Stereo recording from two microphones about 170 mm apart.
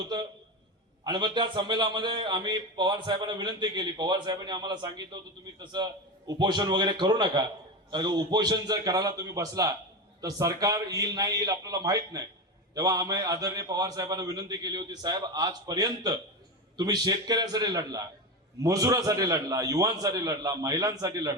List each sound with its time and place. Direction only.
1.0 s a man's voice: 25° right (ahead or behind)